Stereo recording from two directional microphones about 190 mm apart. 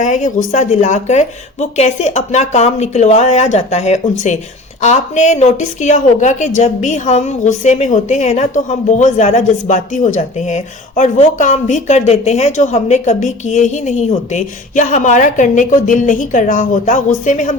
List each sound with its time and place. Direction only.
0.0 s a woman's voice: 40° left (ahead or behind)